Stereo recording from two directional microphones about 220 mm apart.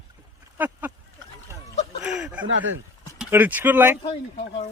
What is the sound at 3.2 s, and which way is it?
Speech, 10° right (ahead or behind).